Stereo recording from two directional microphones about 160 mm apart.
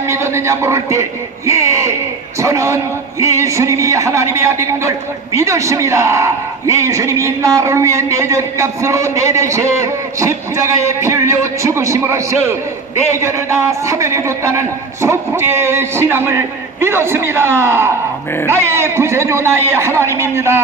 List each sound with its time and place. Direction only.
0.1 s a man's voice: 15° right (ahead or behind)